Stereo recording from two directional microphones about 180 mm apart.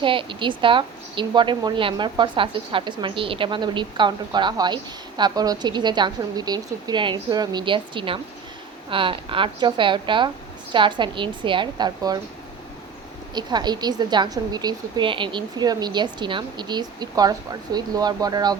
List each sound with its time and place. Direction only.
0.0 s a woman's voice: 30° right (ahead or behind)
13.3 s a woman's voice: 25° right (ahead or behind)